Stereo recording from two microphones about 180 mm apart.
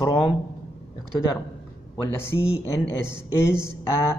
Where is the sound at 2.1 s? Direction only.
15° left (ahead or behind).